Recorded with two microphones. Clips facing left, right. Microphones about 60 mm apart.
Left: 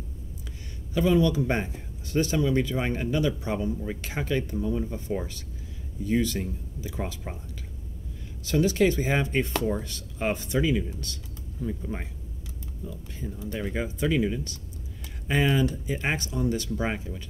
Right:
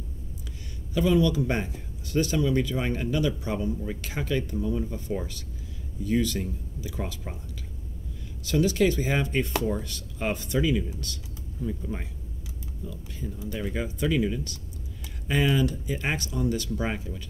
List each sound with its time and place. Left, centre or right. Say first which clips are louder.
0.9 s speech: even; left
8.5 s speech: even; left
13.5 s speech: left 1 dB; left